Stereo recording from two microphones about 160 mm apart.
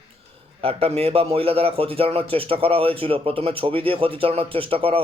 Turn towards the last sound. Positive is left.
turn(degrees=-35)  # may be behind; listen again after turning